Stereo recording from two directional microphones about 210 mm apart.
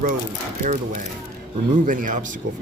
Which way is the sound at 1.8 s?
40° right (ahead or behind).